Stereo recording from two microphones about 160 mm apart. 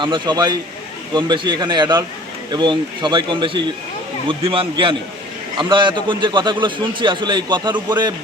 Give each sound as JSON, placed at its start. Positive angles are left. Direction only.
{"t": 0.0, "sound": "a man's voice", "side_deg": -30}